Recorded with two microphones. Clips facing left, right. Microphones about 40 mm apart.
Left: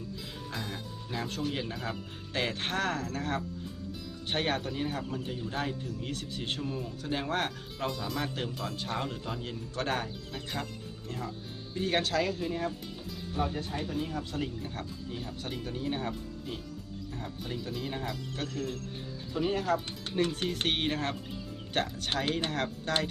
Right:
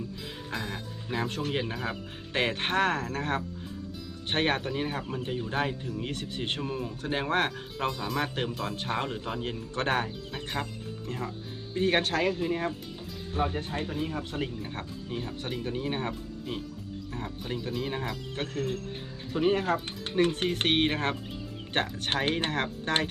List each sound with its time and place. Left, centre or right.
0.5 s speech: centre
1.1 s speech: right
1.7 s speech: centre
2.3 s speech: right
7.9 s speech: centre
8.2 s speech: right
18.3 s speech: right